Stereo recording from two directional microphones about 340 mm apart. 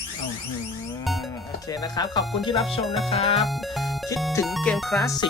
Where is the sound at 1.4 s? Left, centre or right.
Centre.